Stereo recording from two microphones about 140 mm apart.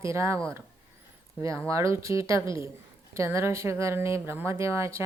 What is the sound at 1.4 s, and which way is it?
A woman's voice, 20° right (ahead or behind).